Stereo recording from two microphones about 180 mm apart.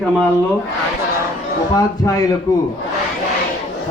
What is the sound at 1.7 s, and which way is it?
Speech, 20° left (ahead or behind).